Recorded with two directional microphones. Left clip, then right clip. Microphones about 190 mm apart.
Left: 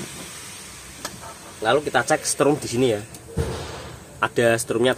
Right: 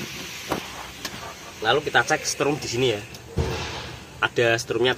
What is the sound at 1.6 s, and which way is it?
Speech, 50° left (ahead or behind).